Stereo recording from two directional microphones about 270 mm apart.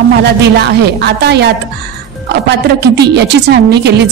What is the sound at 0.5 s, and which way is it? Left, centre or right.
A woman's voice, right.